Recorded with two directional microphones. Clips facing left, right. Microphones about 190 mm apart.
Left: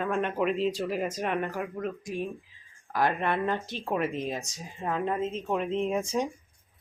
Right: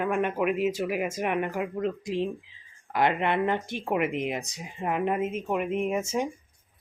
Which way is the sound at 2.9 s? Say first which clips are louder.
Right 2 dB; 20° right (ahead or behind).